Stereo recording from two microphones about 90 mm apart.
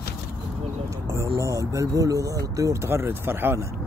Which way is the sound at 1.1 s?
30° right (ahead or behind).